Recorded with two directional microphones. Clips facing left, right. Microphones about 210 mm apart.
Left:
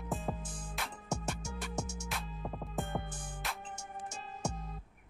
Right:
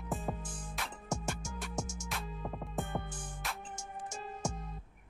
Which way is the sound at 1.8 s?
65° left (ahead or behind).